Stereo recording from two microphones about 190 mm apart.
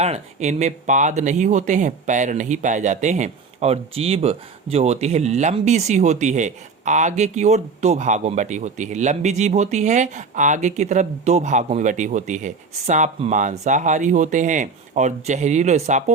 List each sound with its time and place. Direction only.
0.0 s speech: 35° right (ahead or behind)